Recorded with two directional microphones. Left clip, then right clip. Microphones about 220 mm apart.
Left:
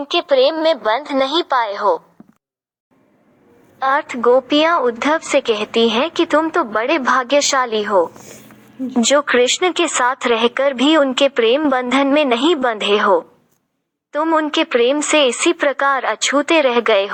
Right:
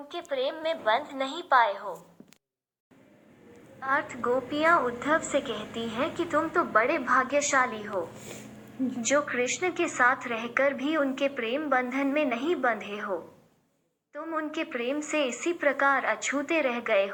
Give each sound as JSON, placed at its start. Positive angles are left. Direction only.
{"t": 0.1, "sound": "a woman's voice", "side_deg": 45}
{"t": 4.2, "sound": "a woman's voice", "side_deg": 40}
{"t": 14.1, "sound": "a woman's voice", "side_deg": 40}
{"t": 16.8, "sound": "a woman's voice", "side_deg": 55}